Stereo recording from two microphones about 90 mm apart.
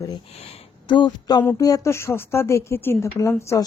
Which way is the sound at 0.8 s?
60° left (ahead or behind).